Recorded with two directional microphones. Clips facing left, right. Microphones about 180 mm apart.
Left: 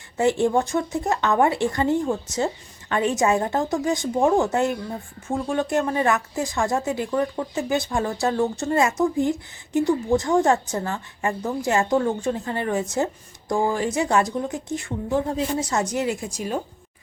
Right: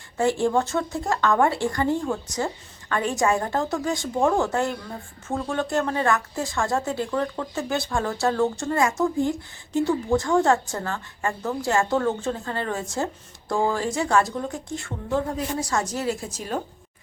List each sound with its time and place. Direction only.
0.2 s a woman's voice: 20° left (ahead or behind)